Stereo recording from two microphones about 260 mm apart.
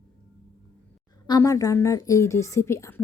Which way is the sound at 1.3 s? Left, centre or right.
Centre.